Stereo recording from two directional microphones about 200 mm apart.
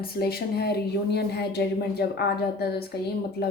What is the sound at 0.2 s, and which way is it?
Speech, 50° left (ahead or behind).